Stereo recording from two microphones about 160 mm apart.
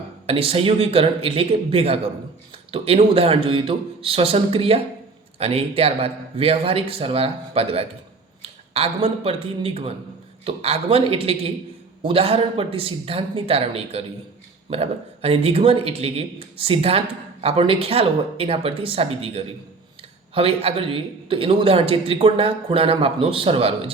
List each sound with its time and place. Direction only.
0.3 s a man's voice: 35° right (ahead or behind)